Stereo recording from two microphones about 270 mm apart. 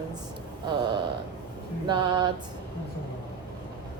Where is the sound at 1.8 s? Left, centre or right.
Centre.